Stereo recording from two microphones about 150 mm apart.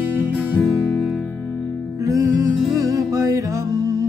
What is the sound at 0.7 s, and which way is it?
Music, 10° left (ahead or behind).